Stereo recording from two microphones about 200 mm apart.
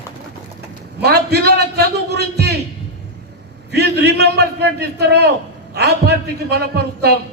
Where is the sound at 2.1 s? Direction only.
55° right (ahead or behind).